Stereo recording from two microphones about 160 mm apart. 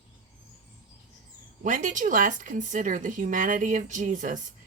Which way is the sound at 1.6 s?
50° right (ahead or behind).